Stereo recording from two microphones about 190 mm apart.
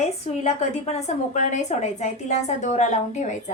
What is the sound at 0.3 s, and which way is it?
A woman's voice, 35° left (ahead or behind).